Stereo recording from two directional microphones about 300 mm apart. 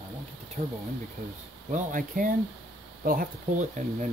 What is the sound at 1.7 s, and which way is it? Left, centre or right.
Speech, right.